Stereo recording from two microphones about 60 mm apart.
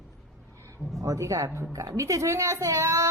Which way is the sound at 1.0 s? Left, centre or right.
Right.